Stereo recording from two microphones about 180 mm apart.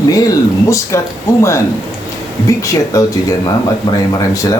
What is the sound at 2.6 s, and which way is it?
Speech, 20° left (ahead or behind).